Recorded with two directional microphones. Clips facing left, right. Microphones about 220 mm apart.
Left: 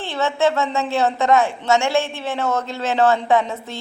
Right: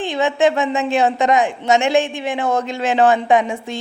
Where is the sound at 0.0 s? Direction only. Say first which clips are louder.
Right 3 dB; 15° right (ahead or behind).